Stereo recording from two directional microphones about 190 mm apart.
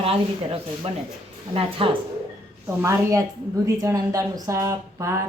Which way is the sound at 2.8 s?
15° right (ahead or behind).